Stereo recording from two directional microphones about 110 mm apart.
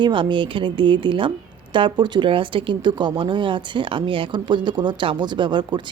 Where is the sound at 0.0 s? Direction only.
50° right (ahead or behind).